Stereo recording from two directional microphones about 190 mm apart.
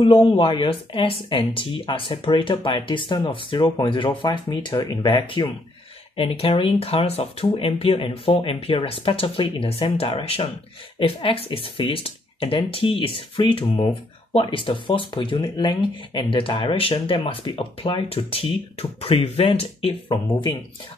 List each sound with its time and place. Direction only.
0.0 s speech: 25° left (ahead or behind)